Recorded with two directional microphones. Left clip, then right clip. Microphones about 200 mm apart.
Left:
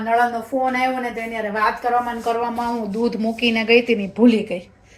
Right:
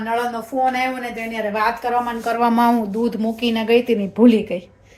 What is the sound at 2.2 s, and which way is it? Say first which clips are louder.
Speech: right 5 dB; 50° right (ahead or behind).